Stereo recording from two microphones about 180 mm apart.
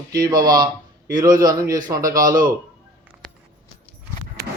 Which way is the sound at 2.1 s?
50° right (ahead or behind).